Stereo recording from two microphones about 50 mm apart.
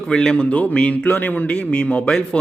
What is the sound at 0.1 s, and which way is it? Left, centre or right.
A man's voice, centre.